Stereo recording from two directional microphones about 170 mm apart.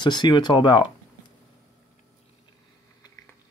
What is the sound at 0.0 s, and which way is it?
Speech, 25° left (ahead or behind).